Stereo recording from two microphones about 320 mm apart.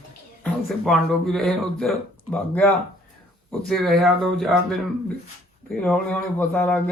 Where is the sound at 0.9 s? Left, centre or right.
Centre.